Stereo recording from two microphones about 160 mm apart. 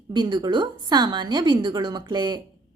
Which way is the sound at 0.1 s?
25° right (ahead or behind).